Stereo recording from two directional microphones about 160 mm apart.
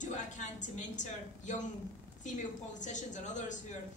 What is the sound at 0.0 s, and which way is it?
A woman's voice, 50° left (ahead or behind).